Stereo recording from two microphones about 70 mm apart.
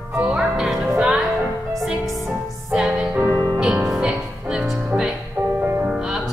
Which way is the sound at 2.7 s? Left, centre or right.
Centre.